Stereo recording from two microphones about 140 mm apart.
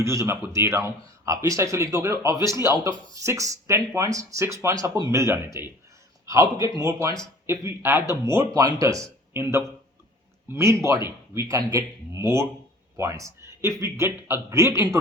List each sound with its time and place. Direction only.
0.0 s a man's voice: 20° right (ahead or behind)